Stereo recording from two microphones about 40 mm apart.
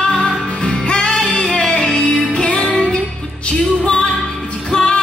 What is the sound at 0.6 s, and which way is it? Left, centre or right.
Music, left.